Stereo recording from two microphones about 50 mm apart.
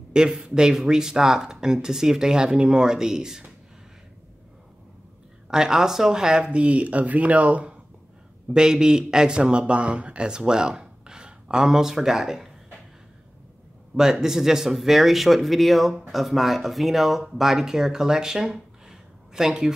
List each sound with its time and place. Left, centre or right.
0.1 s speech: centre
5.5 s speech: centre; by 7.8 s right
8.5 s speech: centre
14.1 s speech: centre
18.9 s a sound: centre